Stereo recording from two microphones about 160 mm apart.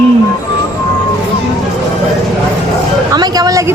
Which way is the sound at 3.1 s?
25° right (ahead or behind).